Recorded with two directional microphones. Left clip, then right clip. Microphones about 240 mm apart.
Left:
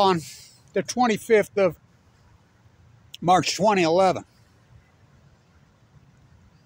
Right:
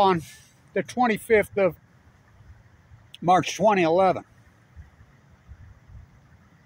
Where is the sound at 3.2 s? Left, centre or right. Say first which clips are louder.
Even; centre.